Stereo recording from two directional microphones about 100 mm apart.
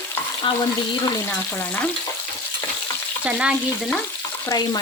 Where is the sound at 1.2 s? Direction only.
20° left (ahead or behind).